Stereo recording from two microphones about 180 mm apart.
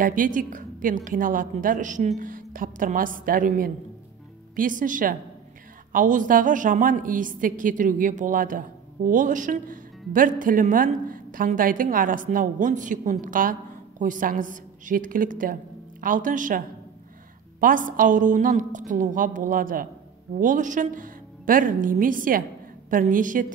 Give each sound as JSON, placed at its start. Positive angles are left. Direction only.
{"t": 0.0, "sound": "a woman's voice", "side_deg": -50}